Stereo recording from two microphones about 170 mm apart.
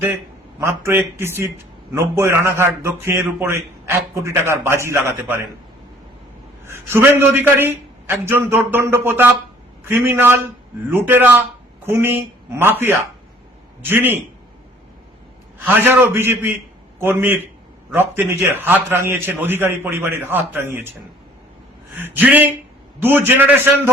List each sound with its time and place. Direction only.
0.6 s a man's voice: 15° right (ahead or behind)
6.7 s a man's voice: 15° right (ahead or behind)
15.6 s a man's voice: 10° right (ahead or behind)
21.9 s a man's voice: 10° right (ahead or behind)